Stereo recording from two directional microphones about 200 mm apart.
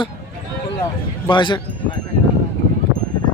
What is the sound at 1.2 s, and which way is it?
Speech, 25° left (ahead or behind).